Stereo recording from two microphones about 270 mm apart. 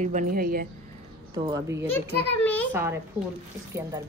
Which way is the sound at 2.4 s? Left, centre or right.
Centre.